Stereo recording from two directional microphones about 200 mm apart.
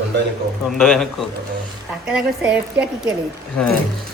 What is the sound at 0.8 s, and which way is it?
Speech, centre (ahead or behind).